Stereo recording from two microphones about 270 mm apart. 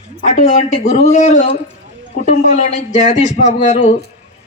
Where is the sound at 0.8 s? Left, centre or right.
Left.